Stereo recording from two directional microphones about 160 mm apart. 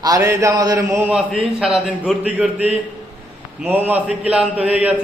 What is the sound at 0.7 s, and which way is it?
A man's voice, 10° right (ahead or behind).